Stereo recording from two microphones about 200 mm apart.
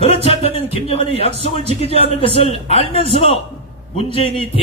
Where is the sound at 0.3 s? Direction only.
30° left (ahead or behind).